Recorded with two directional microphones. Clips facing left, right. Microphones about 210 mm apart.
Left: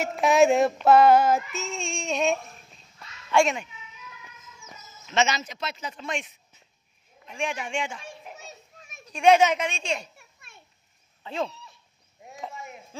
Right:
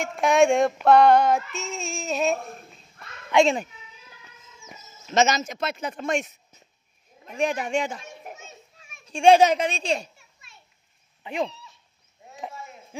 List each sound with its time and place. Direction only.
0.0 s a sound: centre (ahead or behind)
2.4 s a sound: 55° right (ahead or behind)
3.3 s a child's voice: 20° right (ahead or behind)
3.5 s a sound: 35° right (ahead or behind)
5.1 s a man's voice: 45° right (ahead or behind)
8.5 s children playing: 40° left (ahead or behind)
9.0 s speech: 30° right (ahead or behind)
10.1 s children playing: 55° left (ahead or behind)
11.2 s speech: 15° right (ahead or behind)